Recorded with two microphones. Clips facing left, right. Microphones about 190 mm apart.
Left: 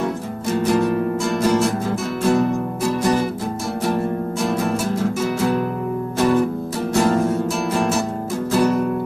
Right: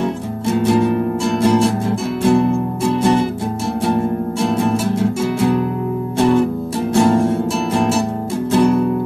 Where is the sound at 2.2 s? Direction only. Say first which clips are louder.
Right 4 dB; 25° right (ahead or behind).